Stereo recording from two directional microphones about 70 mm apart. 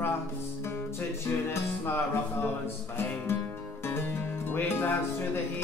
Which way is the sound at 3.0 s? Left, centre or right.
Left.